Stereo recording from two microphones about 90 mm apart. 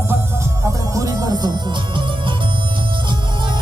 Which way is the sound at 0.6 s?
40° right (ahead or behind).